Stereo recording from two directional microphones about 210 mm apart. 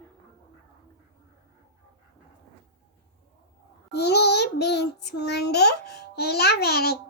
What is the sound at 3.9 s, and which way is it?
Child singing, 50° left (ahead or behind).